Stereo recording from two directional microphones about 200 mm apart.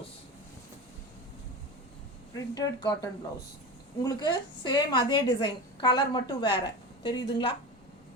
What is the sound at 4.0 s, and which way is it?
A woman's voice, 20° left (ahead or behind).